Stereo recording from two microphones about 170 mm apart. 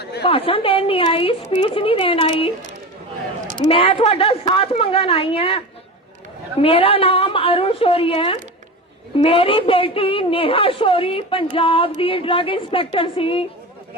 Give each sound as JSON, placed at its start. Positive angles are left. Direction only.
{"t": 0.0, "sound": "a sound", "side_deg": 75}
{"t": 0.3, "sound": "a woman's voice", "side_deg": 30}
{"t": 3.7, "sound": "a woman's voice", "side_deg": 35}